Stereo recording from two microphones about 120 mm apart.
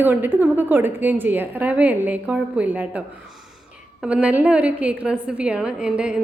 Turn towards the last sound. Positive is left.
turn(degrees=-10)  # may be behind; listen again after turning